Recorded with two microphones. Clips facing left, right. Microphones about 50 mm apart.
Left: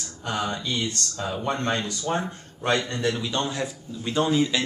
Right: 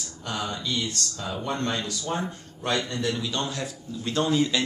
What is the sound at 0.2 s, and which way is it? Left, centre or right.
A man's voice, left.